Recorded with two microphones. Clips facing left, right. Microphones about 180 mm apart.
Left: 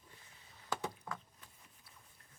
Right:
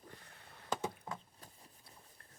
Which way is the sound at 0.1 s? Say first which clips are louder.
Right 6 dB; 60° right (ahead or behind).